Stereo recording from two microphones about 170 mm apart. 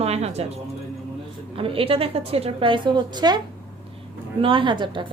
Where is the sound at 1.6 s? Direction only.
35° right (ahead or behind).